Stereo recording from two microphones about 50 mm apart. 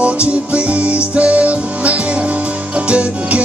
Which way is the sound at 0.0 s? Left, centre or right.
Right.